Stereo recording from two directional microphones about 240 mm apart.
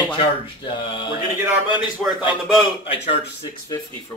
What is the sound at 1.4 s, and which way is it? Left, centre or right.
A woman's voice, centre.